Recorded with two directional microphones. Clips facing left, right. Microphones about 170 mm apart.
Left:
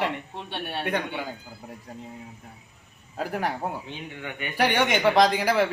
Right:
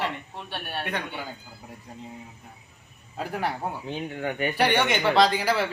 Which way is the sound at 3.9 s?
40° right (ahead or behind).